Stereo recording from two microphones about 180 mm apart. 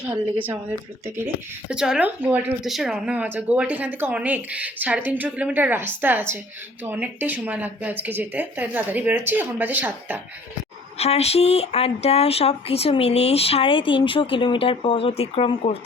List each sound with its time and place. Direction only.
1.0 s speech: 15° right (ahead or behind)
1.7 s speech: 5° right (ahead or behind)
10.9 s speech: 35° left (ahead or behind)